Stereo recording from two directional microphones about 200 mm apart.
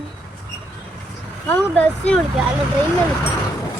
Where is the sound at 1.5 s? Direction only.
5° left (ahead or behind).